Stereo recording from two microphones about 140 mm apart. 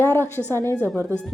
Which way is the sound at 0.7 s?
15° right (ahead or behind).